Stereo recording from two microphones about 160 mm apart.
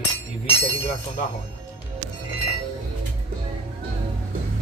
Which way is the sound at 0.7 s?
45° left (ahead or behind).